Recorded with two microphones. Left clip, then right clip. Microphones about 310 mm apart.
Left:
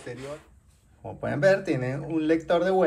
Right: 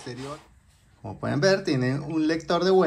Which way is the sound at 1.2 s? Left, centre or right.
Centre.